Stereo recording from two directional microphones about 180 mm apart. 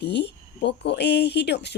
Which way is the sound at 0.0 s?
70° left (ahead or behind).